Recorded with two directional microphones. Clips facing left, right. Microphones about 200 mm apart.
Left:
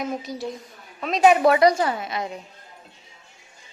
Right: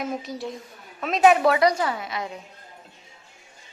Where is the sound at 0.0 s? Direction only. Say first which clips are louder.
Left 1 dB; centre (ahead or behind).